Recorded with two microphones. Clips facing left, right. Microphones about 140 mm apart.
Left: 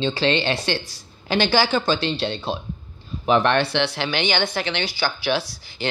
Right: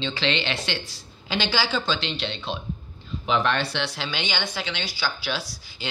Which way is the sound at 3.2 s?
55° left (ahead or behind).